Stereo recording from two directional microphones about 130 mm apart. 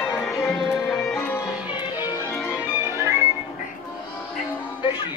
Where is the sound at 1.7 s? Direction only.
35° left (ahead or behind).